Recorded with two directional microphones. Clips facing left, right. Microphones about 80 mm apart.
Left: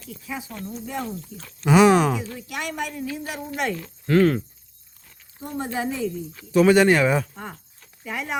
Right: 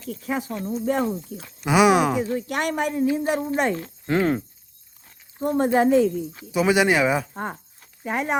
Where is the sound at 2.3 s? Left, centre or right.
Right.